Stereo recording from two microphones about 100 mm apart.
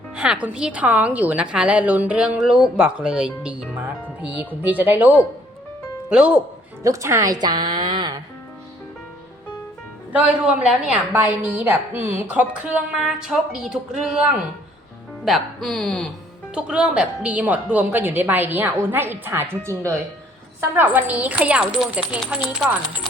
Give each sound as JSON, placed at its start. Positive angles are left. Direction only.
{"t": 0.2, "sound": "a woman's voice", "side_deg": -10}
{"t": 6.8, "sound": "a woman's voice", "side_deg": -30}
{"t": 10.1, "sound": "a woman's voice", "side_deg": -15}
{"t": 15.2, "sound": "speech", "side_deg": 0}
{"t": 16.6, "sound": "a woman's voice", "side_deg": -10}